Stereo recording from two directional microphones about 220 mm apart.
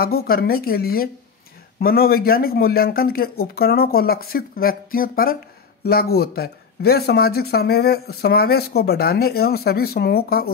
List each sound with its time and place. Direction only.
0.0 s speech: 45° left (ahead or behind)